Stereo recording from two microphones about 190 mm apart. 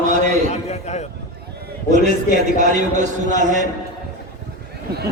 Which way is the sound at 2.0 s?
45° left (ahead or behind).